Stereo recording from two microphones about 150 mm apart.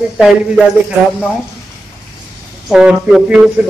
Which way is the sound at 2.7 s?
5° right (ahead or behind).